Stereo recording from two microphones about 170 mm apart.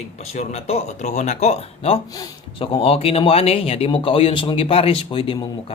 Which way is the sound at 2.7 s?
35° left (ahead or behind).